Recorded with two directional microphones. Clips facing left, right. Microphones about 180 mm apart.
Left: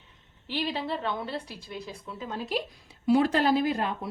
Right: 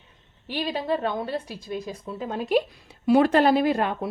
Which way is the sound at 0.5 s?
45° right (ahead or behind).